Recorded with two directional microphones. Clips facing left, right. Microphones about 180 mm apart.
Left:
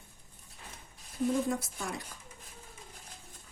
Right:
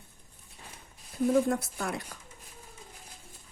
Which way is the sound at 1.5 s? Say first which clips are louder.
Right 4 dB; 65° right (ahead or behind).